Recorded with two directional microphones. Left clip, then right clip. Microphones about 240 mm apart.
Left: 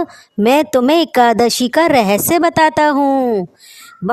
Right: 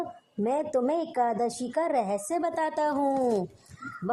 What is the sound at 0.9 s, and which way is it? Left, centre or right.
Speech, left.